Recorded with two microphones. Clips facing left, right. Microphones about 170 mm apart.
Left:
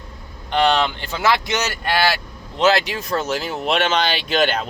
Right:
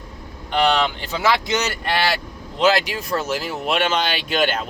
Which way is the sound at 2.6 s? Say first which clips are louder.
Left 1 dB; 10° right (ahead or behind).